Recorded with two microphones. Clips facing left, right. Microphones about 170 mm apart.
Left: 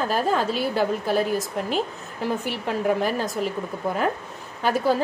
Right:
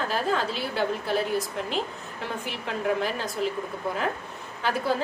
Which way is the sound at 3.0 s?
45° left (ahead or behind).